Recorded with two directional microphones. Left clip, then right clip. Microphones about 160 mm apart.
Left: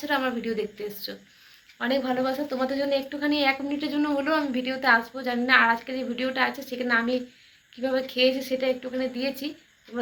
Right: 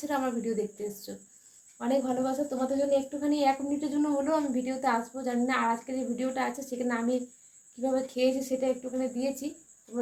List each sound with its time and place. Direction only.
0.1 s a woman's voice: 25° right (ahead or behind)